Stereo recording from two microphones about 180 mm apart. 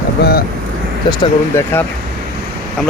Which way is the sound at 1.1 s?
25° left (ahead or behind).